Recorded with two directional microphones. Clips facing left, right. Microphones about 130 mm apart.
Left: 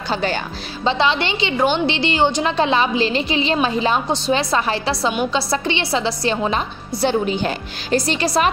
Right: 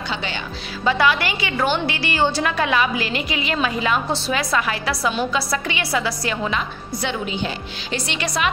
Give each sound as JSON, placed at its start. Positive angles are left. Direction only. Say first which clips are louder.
{"t": 0.1, "sound": "speech", "louder": "left 8 dB", "side_deg": 40}
{"t": 0.8, "sound": "a woman's voice", "louder": "left 1 dB", "side_deg": 25}